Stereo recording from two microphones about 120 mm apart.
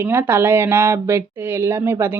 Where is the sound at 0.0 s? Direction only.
20° right (ahead or behind).